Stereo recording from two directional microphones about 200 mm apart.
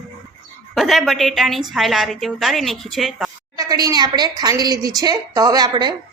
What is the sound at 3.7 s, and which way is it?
A woman's voice, 20° right (ahead or behind).